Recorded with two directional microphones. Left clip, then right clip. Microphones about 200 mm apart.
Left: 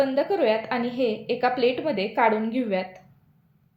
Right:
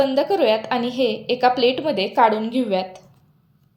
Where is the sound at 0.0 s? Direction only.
25° right (ahead or behind).